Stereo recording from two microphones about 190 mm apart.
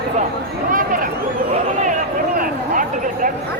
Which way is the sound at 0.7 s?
45° right (ahead or behind).